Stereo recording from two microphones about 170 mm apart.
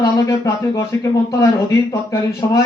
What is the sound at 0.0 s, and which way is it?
Speech, 20° left (ahead or behind).